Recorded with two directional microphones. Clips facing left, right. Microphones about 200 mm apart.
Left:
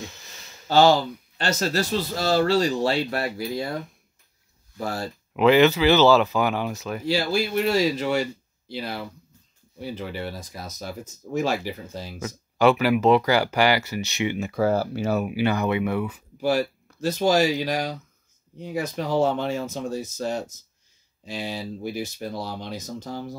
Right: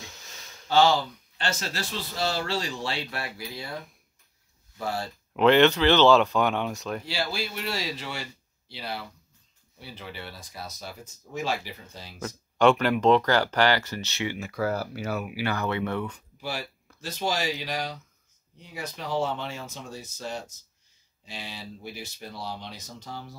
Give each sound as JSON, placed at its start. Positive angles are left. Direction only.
{"t": 0.0, "sound": "a sound", "side_deg": 0}
{"t": 0.7, "sound": "a man's voice", "side_deg": 40}
{"t": 4.7, "sound": "speech", "side_deg": 45}
{"t": 5.3, "sound": "speech", "side_deg": 5}
{"t": 7.1, "sound": "speech", "side_deg": 45}
{"t": 12.2, "sound": "speech", "side_deg": 5}
{"t": 16.3, "sound": "speech", "side_deg": 45}